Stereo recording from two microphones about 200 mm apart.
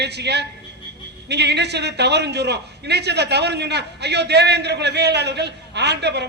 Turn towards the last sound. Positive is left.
turn(degrees=-55)  # may be behind; listen again after turning